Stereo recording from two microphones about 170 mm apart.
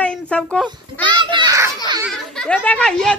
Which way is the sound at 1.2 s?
30° right (ahead or behind).